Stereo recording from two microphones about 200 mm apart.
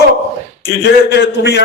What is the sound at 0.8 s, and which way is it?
Speech, 55° left (ahead or behind).